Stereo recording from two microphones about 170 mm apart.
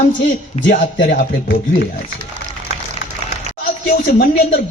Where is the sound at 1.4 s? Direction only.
85° left.